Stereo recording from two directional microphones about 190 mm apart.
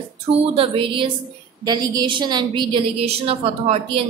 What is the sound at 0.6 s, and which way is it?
A woman's voice, 25° right (ahead or behind).